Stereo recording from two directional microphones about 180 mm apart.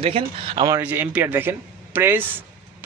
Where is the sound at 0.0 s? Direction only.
30° right (ahead or behind).